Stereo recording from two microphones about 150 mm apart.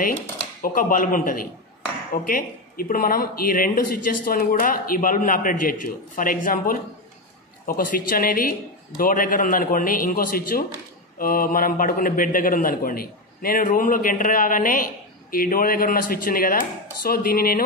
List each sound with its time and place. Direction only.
0.6 s speech: 70° left (ahead or behind)